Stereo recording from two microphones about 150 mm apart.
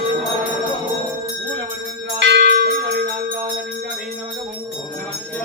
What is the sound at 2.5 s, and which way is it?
Bell, 90° right.